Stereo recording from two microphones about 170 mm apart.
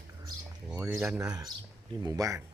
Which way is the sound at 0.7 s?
10° right (ahead or behind).